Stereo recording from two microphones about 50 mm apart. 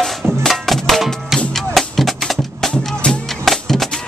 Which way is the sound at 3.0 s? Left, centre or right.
Left.